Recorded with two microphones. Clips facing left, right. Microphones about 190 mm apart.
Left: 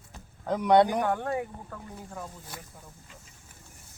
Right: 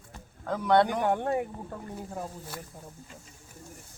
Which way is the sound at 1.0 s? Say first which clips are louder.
Right 2 dB; 20° right (ahead or behind).